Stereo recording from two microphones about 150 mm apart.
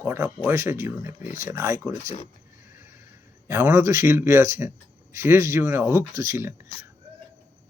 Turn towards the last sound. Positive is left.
turn(degrees=-15)  # may be behind; listen again after turning